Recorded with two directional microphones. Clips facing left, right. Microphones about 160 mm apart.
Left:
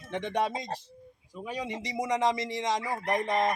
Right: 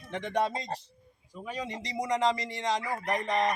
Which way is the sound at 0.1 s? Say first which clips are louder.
Even; 20° left (ahead or behind).